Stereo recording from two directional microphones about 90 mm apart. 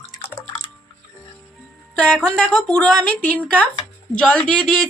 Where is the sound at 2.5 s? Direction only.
10° left (ahead or behind).